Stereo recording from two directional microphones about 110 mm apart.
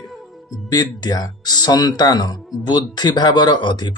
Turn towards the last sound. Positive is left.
turn(degrees=45)  # may be behind; listen again after turning